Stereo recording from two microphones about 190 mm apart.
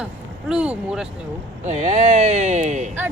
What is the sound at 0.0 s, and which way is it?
Speech, 5° right (ahead or behind).